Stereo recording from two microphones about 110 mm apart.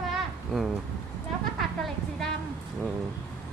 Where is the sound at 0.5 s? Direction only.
5° left (ahead or behind).